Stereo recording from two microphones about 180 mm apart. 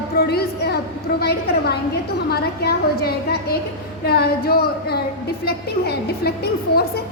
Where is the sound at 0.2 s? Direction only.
60° left (ahead or behind).